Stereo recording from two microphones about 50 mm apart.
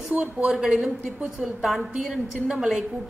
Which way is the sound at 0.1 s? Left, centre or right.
Right.